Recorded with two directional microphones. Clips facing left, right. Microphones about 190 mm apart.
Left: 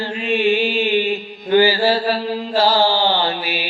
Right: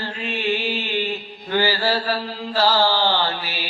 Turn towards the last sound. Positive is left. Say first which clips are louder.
# left 4 dB
turn(degrees=15)  # may be behind; listen again after turning